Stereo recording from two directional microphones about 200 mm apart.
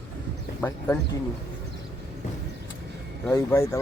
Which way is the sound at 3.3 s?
10° left (ahead or behind).